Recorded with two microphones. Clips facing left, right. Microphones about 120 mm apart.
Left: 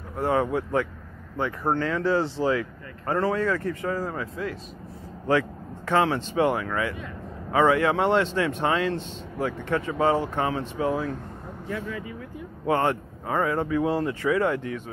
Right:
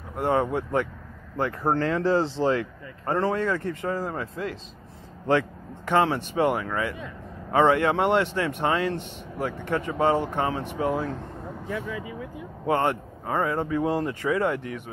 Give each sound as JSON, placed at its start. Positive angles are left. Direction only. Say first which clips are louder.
{"t": 0.2, "sound": "speech", "louder": "even", "side_deg": -25}
{"t": 1.7, "sound": "speech", "louder": "right 1 dB", "side_deg": -35}
{"t": 5.9, "sound": "speech", "louder": "even", "side_deg": -15}